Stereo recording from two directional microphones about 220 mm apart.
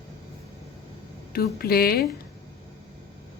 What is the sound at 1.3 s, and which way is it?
Speech, 45° left (ahead or behind).